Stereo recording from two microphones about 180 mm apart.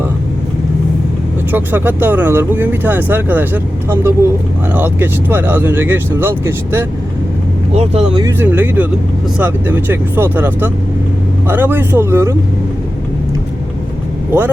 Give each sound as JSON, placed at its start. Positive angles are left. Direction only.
{"t": 1.5, "sound": "speech", "side_deg": -10}
{"t": 7.7, "sound": "speech", "side_deg": -35}
{"t": 8.2, "sound": "speech", "side_deg": -10}
{"t": 14.3, "sound": "speech", "side_deg": -10}